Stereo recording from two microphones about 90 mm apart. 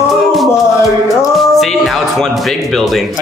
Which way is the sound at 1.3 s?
Centre (ahead or behind).